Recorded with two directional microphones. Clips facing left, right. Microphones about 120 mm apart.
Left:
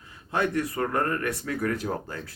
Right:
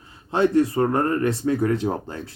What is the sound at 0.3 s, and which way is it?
Speech, 25° right (ahead or behind).